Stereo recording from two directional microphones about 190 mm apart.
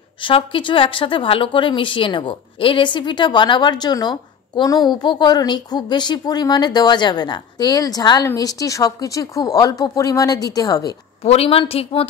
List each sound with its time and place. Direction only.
0.2 s a woman's voice: 25° left (ahead or behind)
11.2 s a woman's voice: 30° left (ahead or behind)